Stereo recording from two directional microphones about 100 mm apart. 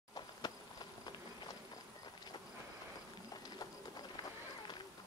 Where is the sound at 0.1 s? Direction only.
45° left (ahead or behind).